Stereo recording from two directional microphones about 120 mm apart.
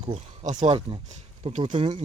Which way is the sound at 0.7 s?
45° right (ahead or behind).